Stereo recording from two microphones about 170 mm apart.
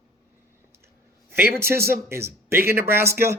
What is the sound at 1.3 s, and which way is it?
Speech, 15° right (ahead or behind).